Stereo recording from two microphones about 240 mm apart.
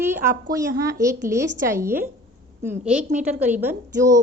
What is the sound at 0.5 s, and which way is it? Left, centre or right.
A woman's voice, centre.